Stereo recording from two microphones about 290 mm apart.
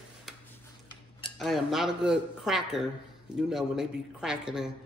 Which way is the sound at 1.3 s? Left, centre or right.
Centre.